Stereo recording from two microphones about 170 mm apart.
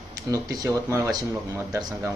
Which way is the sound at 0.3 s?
20° right (ahead or behind).